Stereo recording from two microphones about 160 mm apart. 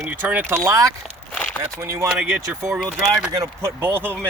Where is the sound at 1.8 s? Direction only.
15° right (ahead or behind).